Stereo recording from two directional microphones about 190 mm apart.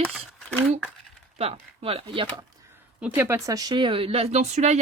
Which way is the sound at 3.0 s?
10° right (ahead or behind).